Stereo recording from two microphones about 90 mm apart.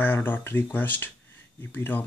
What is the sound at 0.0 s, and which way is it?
Speech, 20° left (ahead or behind).